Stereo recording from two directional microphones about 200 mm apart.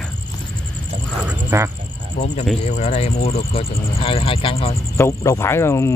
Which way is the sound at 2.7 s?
35° left (ahead or behind).